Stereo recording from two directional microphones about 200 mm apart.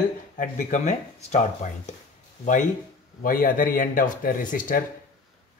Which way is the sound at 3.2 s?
45° left (ahead or behind).